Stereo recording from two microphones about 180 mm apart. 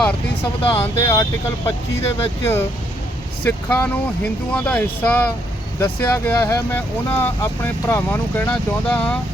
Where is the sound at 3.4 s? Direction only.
10° left (ahead or behind).